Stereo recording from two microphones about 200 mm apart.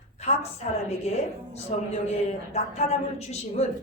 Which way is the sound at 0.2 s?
35° left (ahead or behind).